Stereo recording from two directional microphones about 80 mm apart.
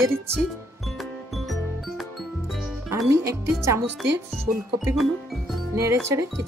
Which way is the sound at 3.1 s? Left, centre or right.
Right.